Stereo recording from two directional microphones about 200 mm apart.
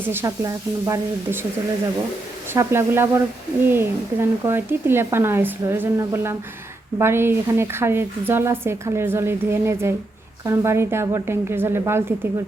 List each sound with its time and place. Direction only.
0.1 s a woman's voice: 15° right (ahead or behind)
2.5 s a woman's voice: 10° right (ahead or behind)